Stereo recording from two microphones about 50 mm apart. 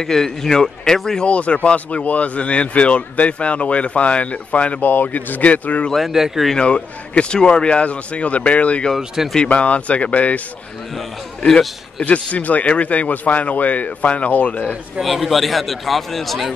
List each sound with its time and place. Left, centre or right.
0.0 s speech: centre
1.2 s speech: left
4.8 s speech: left
5.9 s a man's voice: centre
6.5 s speech: left
8.9 s a man's voice: centre
9.5 s speech: left
11.0 s speech: centre
12.0 s speech: left
15.0 s a man's voice: centre